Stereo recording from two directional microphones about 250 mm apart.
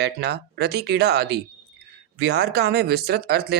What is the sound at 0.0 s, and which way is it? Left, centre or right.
Speech, right.